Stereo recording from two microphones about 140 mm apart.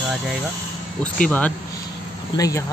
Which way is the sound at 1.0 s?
10° left (ahead or behind).